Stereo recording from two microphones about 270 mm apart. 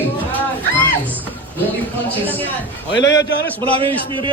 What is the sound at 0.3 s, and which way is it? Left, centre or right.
Music, centre.